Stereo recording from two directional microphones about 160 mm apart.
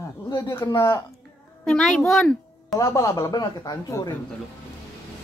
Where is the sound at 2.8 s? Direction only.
20° left (ahead or behind).